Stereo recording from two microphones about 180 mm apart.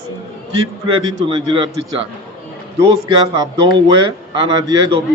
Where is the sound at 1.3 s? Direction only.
25° right (ahead or behind).